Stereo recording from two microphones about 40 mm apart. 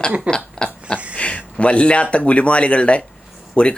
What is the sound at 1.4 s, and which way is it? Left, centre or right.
Speech, left.